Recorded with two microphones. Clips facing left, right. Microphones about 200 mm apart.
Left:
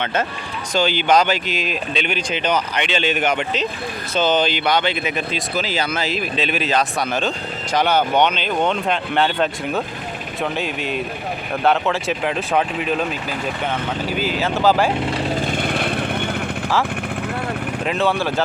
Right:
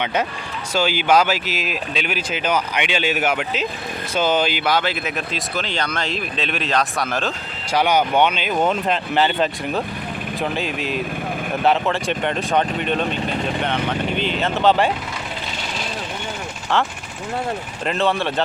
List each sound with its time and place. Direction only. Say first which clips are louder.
0.0 s speech: even; 15° right (ahead or behind)
15.4 s vehicle: left 8 dB; 55° left (ahead or behind)
17.8 s speech: even; centre (ahead or behind)